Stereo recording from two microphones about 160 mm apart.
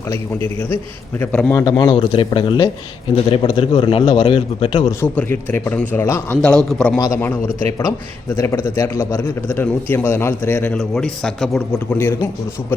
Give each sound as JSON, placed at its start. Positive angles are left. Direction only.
{"t": 1.2, "sound": "a man's voice", "side_deg": 10}
{"t": 1.5, "sound": "a man's voice", "side_deg": 25}
{"t": 4.9, "sound": "a man's voice", "side_deg": 15}
{"t": 7.0, "sound": "a man's voice", "side_deg": 15}